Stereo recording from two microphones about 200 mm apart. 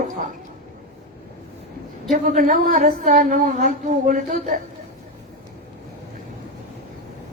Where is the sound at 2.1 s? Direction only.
40° right (ahead or behind).